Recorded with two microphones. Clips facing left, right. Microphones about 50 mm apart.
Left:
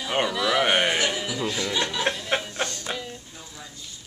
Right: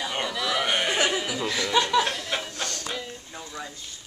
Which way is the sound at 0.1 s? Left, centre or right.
Centre.